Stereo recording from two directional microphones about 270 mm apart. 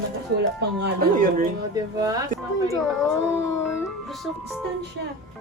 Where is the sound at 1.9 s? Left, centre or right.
Centre.